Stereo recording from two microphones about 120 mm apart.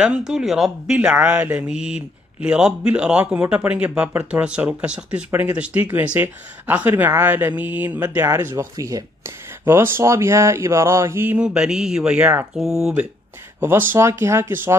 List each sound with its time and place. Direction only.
0.0 s speech: 5° right (ahead or behind); by 11.3 s 20° right (ahead or behind)
11.3 s speech: 5° right (ahead or behind)
13.6 s speech: 20° right (ahead or behind)